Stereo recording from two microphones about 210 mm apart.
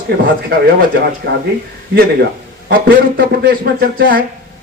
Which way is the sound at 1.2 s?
50° right (ahead or behind).